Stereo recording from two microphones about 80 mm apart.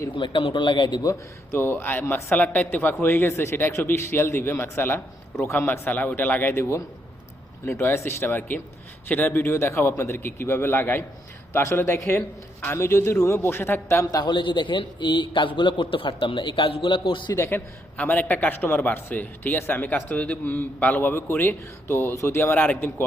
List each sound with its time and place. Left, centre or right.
0.2 s a man's voice: left
1.5 s a man's voice: left
14.3 s a man's voice: left
17.5 s a man's voice: left